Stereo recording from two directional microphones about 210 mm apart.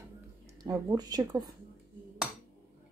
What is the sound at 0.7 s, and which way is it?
Speech, 15° right (ahead or behind).